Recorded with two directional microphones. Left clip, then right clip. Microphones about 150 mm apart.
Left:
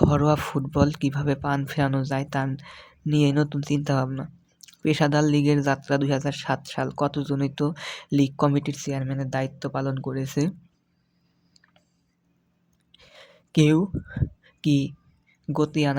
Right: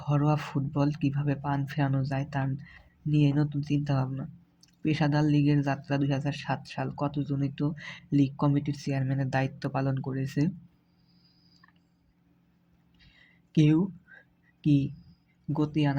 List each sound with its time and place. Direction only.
0.0 s speech: 35° left (ahead or behind)
8.9 s speech: 15° left (ahead or behind); by 10.5 s 30° left (ahead or behind)
13.0 s a sound: 35° left (ahead or behind)
14.6 s speech: 40° left (ahead or behind)